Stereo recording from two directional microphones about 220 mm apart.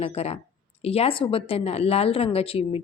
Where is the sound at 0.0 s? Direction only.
30° left (ahead or behind).